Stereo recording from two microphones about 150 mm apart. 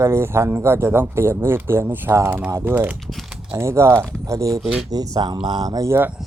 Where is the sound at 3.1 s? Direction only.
Centre (ahead or behind).